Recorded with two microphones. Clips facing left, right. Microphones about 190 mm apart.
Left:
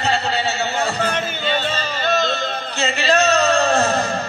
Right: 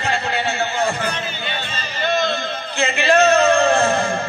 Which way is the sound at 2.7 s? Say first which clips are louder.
Right 2 dB; 55° right (ahead or behind).